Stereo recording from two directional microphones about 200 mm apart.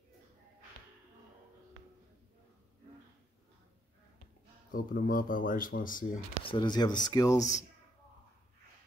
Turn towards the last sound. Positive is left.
turn(degrees=15)  # may be behind; listen again after turning